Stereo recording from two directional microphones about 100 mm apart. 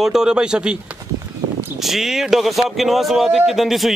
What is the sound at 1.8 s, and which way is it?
Speech, centre (ahead or behind).